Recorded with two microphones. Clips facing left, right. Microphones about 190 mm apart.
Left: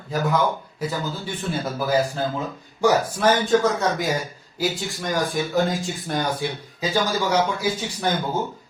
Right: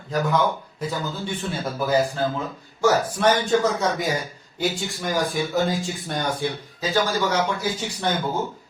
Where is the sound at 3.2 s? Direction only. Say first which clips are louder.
Left 1 dB; centre (ahead or behind).